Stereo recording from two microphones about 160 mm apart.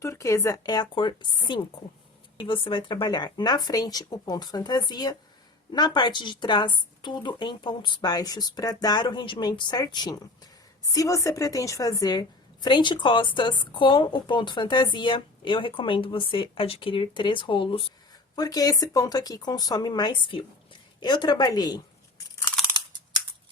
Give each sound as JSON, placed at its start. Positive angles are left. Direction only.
{"t": 0.0, "sound": "a woman's voice", "side_deg": 20}